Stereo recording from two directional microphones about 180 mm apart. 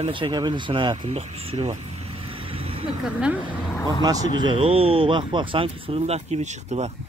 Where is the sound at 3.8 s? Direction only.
20° right (ahead or behind); by 6.9 s 40° right (ahead or behind).